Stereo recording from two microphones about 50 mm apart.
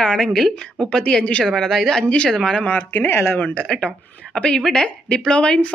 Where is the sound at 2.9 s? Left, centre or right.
Left.